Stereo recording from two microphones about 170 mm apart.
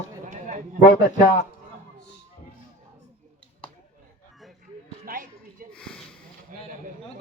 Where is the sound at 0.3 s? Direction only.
45° right (ahead or behind).